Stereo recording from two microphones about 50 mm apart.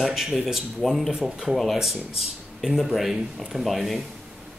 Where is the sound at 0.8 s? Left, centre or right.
Centre.